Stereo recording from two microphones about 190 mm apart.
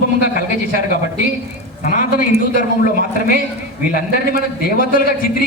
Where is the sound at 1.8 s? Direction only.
45° left (ahead or behind).